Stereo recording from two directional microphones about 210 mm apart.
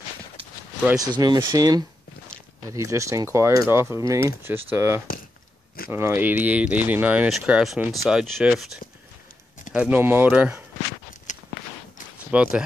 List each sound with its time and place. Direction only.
0.8 s speech: 15° right (ahead or behind); by 8.7 s centre (ahead or behind)
9.8 s speech: 10° right (ahead or behind)
11.3 s walk: 35° left (ahead or behind)
12.3 s speech: 5° right (ahead or behind)